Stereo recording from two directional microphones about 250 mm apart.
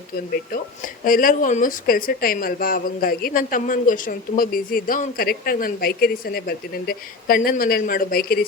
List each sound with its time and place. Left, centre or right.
1.0 s speech: left